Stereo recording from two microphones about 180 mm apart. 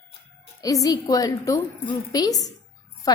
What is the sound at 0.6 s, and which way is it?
A woman's voice, 20° left (ahead or behind).